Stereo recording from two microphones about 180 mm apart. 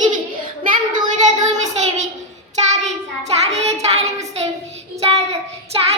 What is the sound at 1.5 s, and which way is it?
Speech, 40° right (ahead or behind).